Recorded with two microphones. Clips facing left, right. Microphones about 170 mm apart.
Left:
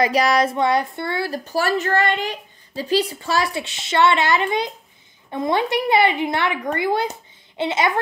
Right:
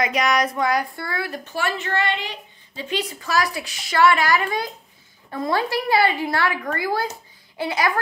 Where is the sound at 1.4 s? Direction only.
40° left (ahead or behind).